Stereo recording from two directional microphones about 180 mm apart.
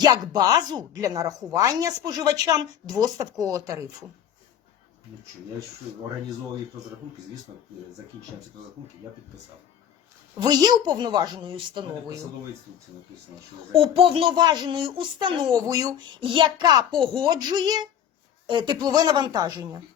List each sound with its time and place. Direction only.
0.0 s speech: 20° right (ahead or behind)
10.4 s speech: 20° right (ahead or behind)
13.7 s speech: 30° right (ahead or behind)